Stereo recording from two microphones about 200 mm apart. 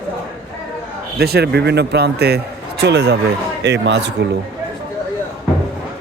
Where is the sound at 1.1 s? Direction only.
50° right (ahead or behind).